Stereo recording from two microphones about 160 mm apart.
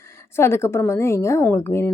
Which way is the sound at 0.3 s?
15° left (ahead or behind).